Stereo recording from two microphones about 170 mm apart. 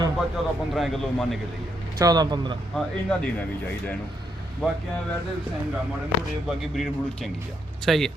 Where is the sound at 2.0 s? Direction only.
25° right (ahead or behind).